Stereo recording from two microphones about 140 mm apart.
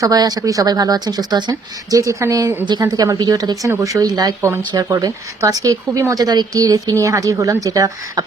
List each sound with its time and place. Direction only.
0.0 s speech: 25° right (ahead or behind)